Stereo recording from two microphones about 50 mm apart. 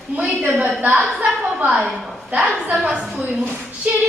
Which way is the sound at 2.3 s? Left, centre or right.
Centre.